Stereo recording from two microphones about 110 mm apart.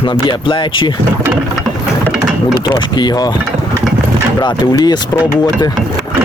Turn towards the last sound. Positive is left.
turn(degrees=40)  # may be behind; listen again after turning